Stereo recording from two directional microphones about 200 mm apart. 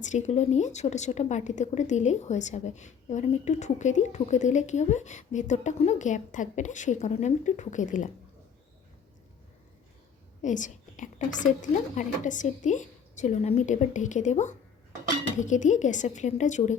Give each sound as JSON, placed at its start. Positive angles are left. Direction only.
{"t": 0.0, "sound": "a woman's voice", "side_deg": 35}
{"t": 10.4, "sound": "a woman's voice", "side_deg": 40}